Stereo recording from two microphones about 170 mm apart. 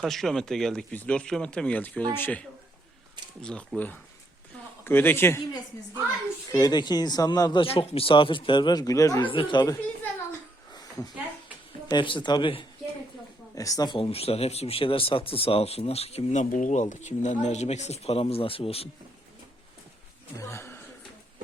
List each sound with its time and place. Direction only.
0.0 s a man's voice: centre (ahead or behind)
6.5 s speech: 25° left (ahead or behind)
11.9 s speech: 30° left (ahead or behind)
20.3 s speech: 15° left (ahead or behind)